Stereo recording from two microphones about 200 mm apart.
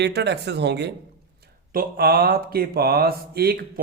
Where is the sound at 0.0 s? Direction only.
60° right (ahead or behind).